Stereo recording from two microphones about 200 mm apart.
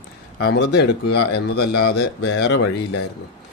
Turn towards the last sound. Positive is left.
turn(degrees=60)  # may be behind; listen again after turning